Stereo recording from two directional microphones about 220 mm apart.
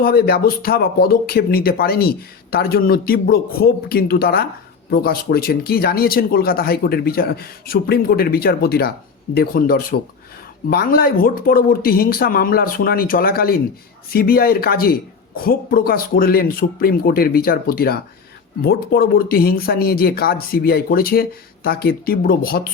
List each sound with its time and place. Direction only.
0.0 s speech: 45° left (ahead or behind)